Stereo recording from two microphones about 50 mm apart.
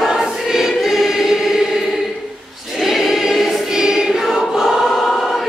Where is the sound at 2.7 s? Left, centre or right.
Centre.